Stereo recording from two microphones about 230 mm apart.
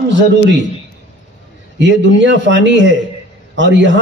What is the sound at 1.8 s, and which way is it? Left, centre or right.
A man's voice, right.